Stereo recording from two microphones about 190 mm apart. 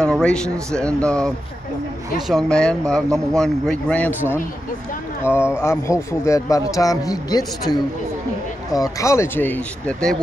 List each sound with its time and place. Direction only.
0.0 s a sound: 5° left (ahead or behind)
0.7 s speech: 5° left (ahead or behind)
5.2 s speech: 10° left (ahead or behind)
8.7 s speech: 15° left (ahead or behind)